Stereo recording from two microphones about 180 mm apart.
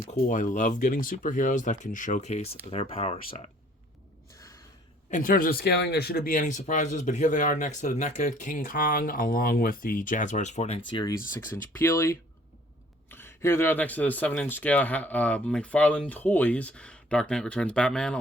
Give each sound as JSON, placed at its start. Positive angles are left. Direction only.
{"t": 0.1, "sound": "speech", "side_deg": 45}
{"t": 5.1, "sound": "speech", "side_deg": 50}
{"t": 10.9, "sound": "speech", "side_deg": 20}